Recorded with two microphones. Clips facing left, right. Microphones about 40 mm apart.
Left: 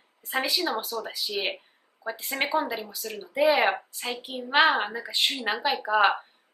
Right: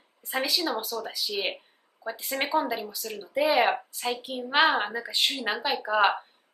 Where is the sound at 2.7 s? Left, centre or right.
Centre.